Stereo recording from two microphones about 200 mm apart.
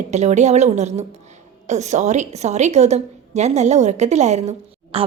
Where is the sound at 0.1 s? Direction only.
35° right (ahead or behind).